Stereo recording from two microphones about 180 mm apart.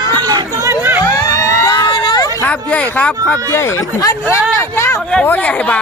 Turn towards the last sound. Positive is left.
turn(degrees=10)  # may be behind; listen again after turning